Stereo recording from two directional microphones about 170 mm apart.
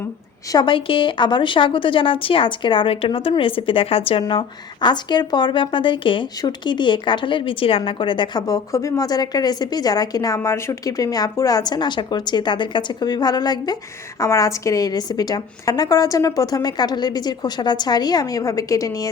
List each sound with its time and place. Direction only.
0.5 s a woman's voice: 30° left (ahead or behind)